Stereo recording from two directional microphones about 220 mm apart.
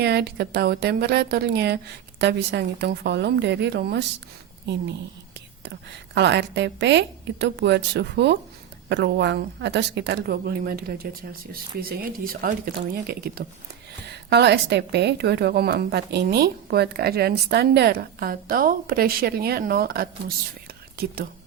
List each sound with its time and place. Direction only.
0.0 s a woman's voice: 45° right (ahead or behind)